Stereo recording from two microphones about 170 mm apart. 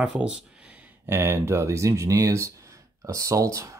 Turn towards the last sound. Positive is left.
turn(degrees=-20)  # may be behind; listen again after turning